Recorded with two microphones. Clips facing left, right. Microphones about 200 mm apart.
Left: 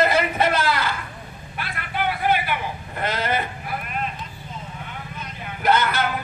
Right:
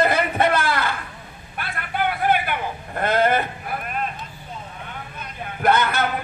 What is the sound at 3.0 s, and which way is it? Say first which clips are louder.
Speech: right 6 dB; 55° right (ahead or behind).